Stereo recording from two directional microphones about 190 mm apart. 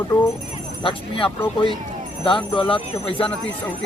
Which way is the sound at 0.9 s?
30° left (ahead or behind).